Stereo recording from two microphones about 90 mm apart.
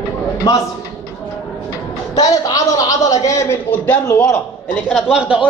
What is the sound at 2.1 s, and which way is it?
A man's voice, 45° left (ahead or behind).